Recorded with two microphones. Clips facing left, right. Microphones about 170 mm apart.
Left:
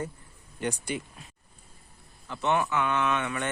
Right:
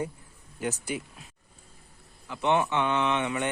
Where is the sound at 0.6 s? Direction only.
5° right (ahead or behind).